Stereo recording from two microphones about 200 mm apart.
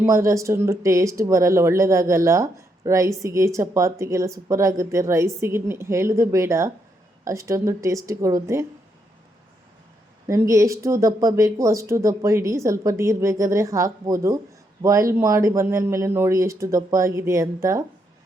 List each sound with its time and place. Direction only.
0.0 s speech: 15° right (ahead or behind)
10.2 s speech: 15° right (ahead or behind)